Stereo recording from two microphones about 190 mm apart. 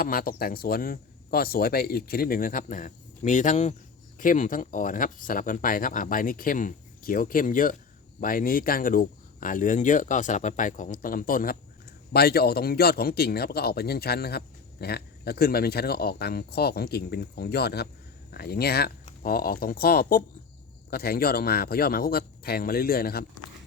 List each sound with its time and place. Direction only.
0.0 s a man's voice: 50° left (ahead or behind)